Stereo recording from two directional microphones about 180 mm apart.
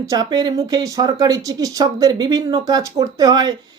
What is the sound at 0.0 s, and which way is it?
Speech, 20° right (ahead or behind).